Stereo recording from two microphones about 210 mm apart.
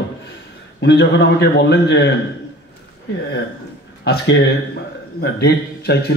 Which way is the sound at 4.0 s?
50° left (ahead or behind).